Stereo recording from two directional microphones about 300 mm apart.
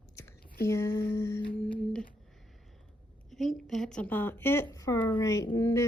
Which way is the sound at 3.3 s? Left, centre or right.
Centre.